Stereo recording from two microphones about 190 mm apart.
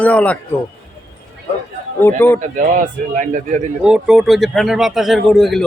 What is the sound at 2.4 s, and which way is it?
Speech, 45° right (ahead or behind).